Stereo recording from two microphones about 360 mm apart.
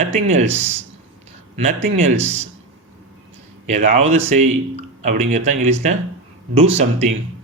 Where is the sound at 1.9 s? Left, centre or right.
Centre.